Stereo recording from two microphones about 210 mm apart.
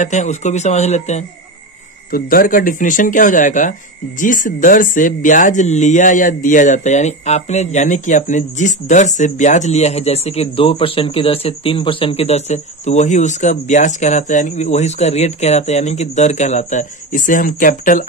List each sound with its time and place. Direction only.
0.0 s speech: 35° left (ahead or behind)
2.0 s speech: 45° left (ahead or behind)